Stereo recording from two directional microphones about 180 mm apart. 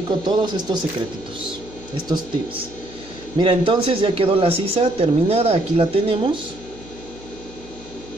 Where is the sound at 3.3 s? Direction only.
30° right (ahead or behind).